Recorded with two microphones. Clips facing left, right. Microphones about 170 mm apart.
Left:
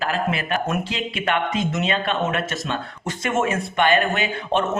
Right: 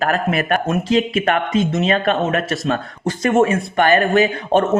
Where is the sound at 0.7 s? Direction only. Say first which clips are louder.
Right 8 dB; 40° right (ahead or behind).